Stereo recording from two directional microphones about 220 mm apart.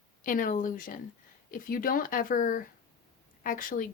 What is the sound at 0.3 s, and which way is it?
Speech, 35° left (ahead or behind).